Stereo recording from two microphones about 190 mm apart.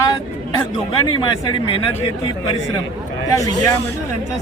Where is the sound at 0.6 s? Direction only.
25° left (ahead or behind).